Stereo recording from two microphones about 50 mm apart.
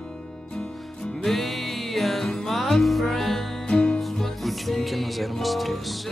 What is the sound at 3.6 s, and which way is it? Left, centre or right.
Music, centre.